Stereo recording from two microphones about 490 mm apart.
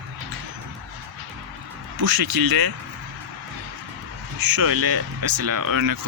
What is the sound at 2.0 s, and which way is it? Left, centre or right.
Speech, right.